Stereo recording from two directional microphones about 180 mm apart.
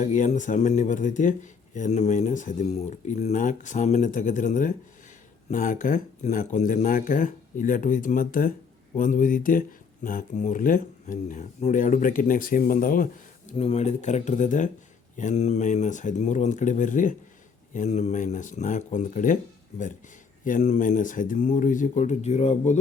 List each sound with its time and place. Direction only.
0.0 s speech: 45° left (ahead or behind)
13.5 s speech: 35° left (ahead or behind)
20.4 s speech: 45° left (ahead or behind)